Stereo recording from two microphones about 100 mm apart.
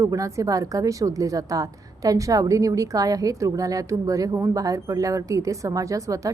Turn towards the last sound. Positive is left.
turn(degrees=-35)  # may be behind; listen again after turning